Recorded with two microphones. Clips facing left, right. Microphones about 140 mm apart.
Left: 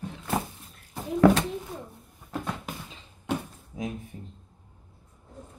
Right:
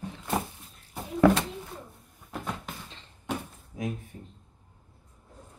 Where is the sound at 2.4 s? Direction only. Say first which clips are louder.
Left 2 dB; 10° left (ahead or behind).